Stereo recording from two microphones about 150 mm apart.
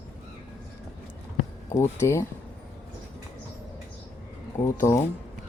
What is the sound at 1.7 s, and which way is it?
Speech, 15° left (ahead or behind).